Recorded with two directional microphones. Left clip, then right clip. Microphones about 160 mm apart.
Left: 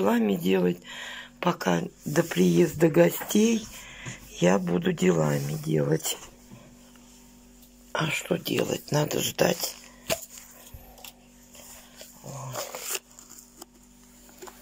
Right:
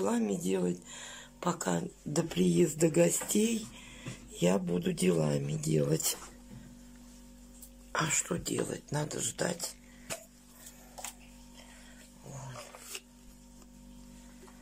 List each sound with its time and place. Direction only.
0.0 s speech: centre (ahead or behind); by 5.9 s 15° right (ahead or behind)
7.9 s speech: centre (ahead or behind); by 9.7 s 15° left (ahead or behind)
12.9 s a sound: 60° left (ahead or behind)